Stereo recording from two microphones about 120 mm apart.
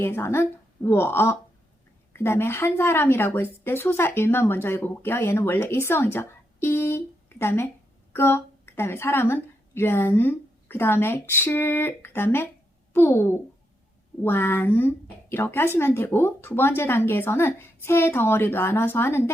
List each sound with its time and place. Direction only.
0.0 s a woman's voice: 20° left (ahead or behind)